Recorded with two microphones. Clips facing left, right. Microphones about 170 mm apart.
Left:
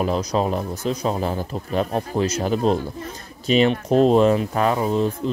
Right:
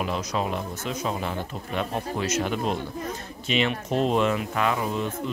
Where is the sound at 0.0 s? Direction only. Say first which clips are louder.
Left 6 dB; 35° left (ahead or behind).